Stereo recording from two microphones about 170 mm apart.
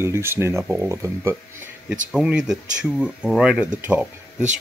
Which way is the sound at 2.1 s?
5° right (ahead or behind).